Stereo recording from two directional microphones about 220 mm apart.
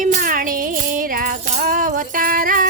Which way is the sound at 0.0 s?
35° right (ahead or behind).